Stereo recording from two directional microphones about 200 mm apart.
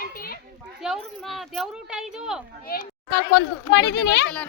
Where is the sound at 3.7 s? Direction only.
60° left (ahead or behind).